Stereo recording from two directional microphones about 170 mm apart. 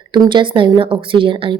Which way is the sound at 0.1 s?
30° right (ahead or behind).